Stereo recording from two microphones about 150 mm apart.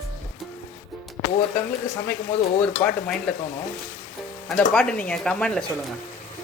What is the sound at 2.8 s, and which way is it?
Speech, 5° left (ahead or behind).